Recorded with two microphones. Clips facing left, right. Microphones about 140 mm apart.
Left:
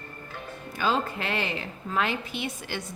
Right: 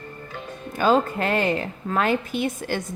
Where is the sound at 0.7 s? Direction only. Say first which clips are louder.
Right 7 dB; 50° right (ahead or behind).